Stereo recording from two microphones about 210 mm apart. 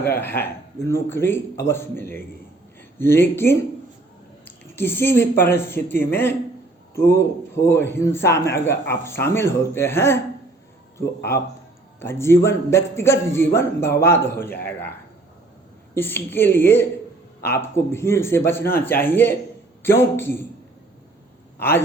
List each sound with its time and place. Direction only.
0.0 s a man's voice: 10° left (ahead or behind)
16.0 s a man's voice: 10° left (ahead or behind)